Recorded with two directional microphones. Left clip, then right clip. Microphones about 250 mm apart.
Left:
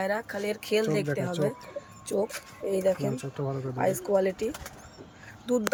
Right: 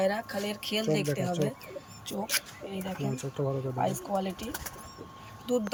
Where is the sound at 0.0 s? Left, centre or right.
Centre.